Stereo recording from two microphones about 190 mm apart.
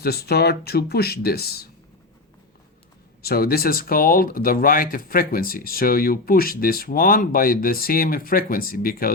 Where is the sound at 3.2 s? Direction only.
55° left (ahead or behind).